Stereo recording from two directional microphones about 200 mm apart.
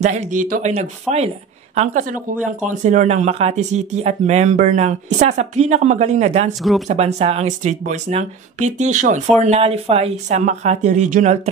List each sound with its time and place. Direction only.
0.0 s speech: 35° right (ahead or behind)